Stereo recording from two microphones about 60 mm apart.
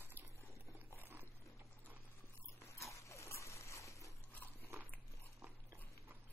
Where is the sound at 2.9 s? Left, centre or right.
Left.